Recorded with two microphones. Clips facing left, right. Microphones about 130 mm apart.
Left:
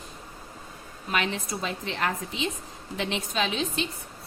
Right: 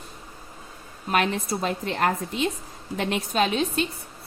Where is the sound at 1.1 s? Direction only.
45° right (ahead or behind).